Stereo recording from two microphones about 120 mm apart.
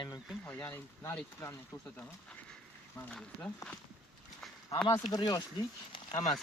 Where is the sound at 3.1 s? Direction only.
10° left (ahead or behind).